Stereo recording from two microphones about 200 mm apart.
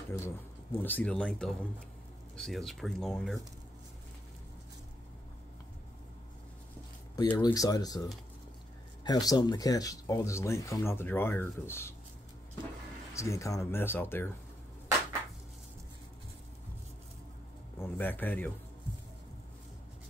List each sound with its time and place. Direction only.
0.7 s speech: 10° left (ahead or behind)
7.2 s speech: 20° left (ahead or behind)
9.0 s speech: 20° left (ahead or behind)
13.1 s speech: 15° left (ahead or behind)
17.7 s speech: 10° left (ahead or behind)